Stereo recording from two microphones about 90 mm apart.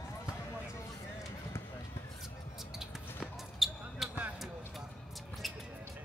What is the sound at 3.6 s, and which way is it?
Basketball bounce, centre (ahead or behind).